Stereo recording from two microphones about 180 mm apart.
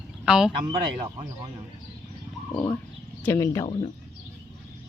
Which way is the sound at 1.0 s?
40° right (ahead or behind).